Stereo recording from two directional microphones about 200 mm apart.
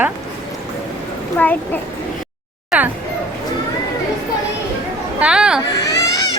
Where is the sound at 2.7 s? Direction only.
Centre (ahead or behind).